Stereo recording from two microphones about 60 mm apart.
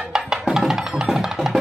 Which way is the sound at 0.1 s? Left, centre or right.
Centre.